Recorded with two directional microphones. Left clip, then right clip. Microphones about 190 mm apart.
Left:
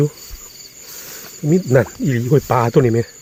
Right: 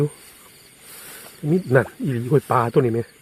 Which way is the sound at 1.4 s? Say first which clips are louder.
Left 4 dB; 10° left (ahead or behind).